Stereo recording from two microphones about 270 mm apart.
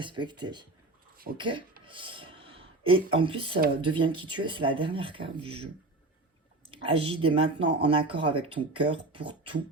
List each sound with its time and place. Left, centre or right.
0.0 s speech: centre
1.8 s a sound: centre
3.8 s speech: centre
6.7 s speech: centre